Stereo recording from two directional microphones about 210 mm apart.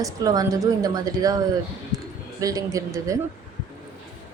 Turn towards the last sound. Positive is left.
turn(degrees=-15)  # may be behind; listen again after turning